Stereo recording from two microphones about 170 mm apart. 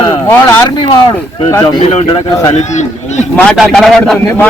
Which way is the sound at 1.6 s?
35° left (ahead or behind).